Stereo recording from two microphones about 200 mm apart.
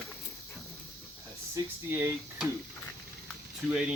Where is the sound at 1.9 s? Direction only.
10° right (ahead or behind).